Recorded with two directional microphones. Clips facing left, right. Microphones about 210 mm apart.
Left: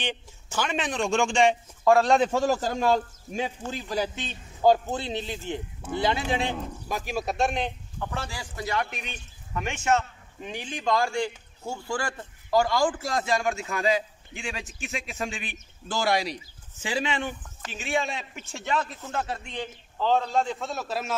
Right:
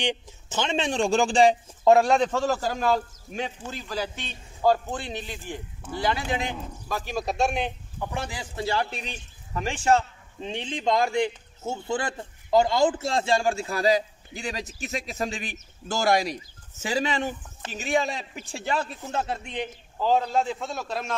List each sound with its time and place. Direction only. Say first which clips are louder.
0.0 s a man's voice: right 4 dB; 20° right (ahead or behind)
2.0 s a man's voice: left 1 dB; 5° left (ahead or behind); by 6.4 s 25° left (ahead or behind)
6.9 s a man's voice: right 1 dB; 10° left (ahead or behind)